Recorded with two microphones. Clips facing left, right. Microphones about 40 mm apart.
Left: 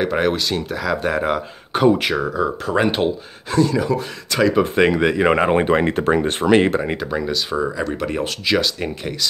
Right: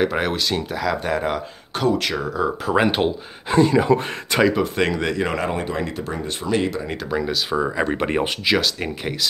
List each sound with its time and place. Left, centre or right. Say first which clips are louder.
0.0 s speech: left 2 dB; centre
1.8 s speech: left 5 dB; centre
3.4 s speech: right 2 dB; right
4.6 s speech: left 5 dB; centre
5.3 s speech: left 8 dB; left
5.7 s speech: left 9 dB; left
7.1 s speech: left 1 dB; centre
7.7 s speech: right 2 dB; right
8.5 s speech: left 4 dB; centre